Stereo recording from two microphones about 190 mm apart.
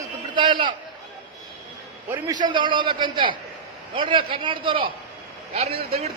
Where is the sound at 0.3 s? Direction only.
25° right (ahead or behind).